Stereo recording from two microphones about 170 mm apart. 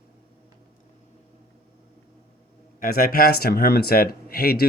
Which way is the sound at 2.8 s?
60° left (ahead or behind).